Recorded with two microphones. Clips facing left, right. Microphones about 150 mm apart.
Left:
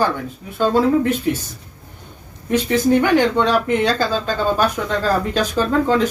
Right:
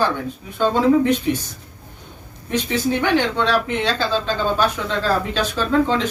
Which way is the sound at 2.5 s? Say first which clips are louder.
Left 5 dB; 10° left (ahead or behind).